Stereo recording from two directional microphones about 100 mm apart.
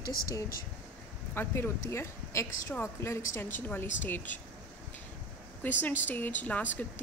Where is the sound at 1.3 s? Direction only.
25° left (ahead or behind).